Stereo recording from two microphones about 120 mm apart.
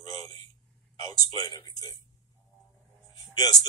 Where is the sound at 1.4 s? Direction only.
35° left (ahead or behind).